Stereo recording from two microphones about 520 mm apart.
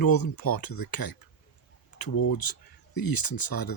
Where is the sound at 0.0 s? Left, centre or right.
Left.